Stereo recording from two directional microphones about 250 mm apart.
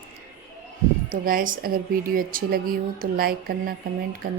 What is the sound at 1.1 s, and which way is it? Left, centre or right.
A woman's voice, right.